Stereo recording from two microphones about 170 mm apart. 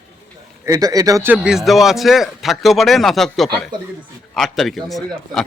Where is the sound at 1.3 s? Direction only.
5° right (ahead or behind).